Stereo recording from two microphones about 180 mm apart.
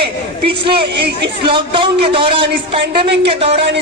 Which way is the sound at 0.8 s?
70° right (ahead or behind).